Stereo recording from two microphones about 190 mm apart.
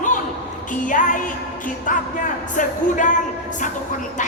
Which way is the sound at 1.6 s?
45° left (ahead or behind).